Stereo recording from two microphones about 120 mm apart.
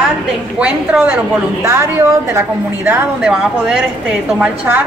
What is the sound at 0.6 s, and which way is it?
Speech, 10° right (ahead or behind).